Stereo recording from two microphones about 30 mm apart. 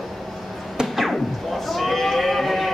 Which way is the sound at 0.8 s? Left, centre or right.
Right.